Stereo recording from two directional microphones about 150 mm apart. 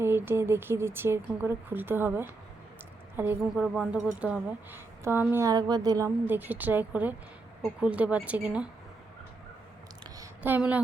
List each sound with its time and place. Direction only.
0.0 s a woman's voice: 15° right (ahead or behind)
6.2 s speech: 10° right (ahead or behind)
10.4 s speech: 10° right (ahead or behind)